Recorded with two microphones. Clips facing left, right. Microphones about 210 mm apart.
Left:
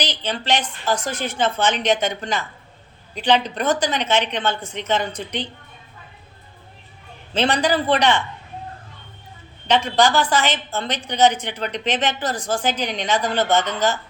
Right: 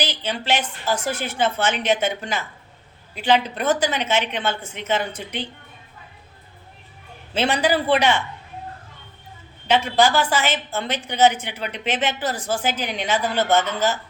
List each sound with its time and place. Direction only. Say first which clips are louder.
0.0 s a woman's voice: even; 10° right (ahead or behind)
7.3 s a woman's voice: left 1 dB; 10° right (ahead or behind)
9.6 s a woman's voice: even; 5° right (ahead or behind)